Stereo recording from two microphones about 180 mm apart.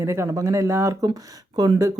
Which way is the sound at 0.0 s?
15° right (ahead or behind).